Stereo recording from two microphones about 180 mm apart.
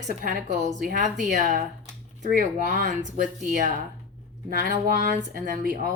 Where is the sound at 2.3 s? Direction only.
50° right (ahead or behind).